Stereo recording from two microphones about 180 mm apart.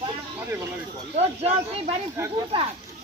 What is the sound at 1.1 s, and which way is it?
Speech, 35° right (ahead or behind).